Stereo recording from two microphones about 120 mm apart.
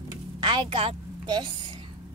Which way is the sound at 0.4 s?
40° right (ahead or behind).